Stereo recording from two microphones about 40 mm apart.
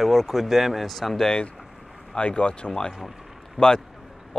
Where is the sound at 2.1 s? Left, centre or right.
Left.